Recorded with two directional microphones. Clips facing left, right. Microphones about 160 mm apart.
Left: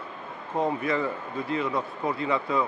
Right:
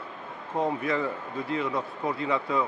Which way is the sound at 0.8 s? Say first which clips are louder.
Left 1 dB; 15° left (ahead or behind).